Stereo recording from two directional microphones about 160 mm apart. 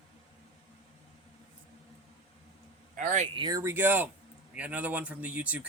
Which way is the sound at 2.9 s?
50° right (ahead or behind).